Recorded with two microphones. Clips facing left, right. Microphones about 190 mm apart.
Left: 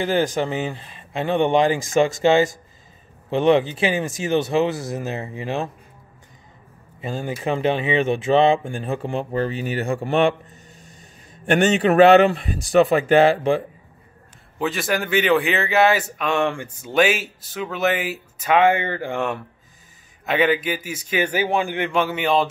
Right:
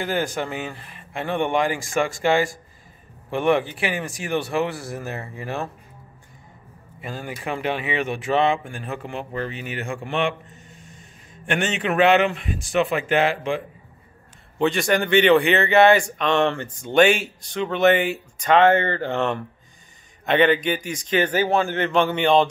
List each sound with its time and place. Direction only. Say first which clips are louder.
0.0 s speech: left 4 dB; 20° left (ahead or behind)
7.0 s a man's voice: left 5 dB; 25° left (ahead or behind)
14.6 s a man's voice: right 3 dB; centre (ahead or behind)